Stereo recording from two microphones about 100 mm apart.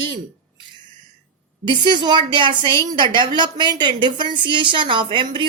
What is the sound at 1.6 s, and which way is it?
A woman's voice, 50° right (ahead or behind).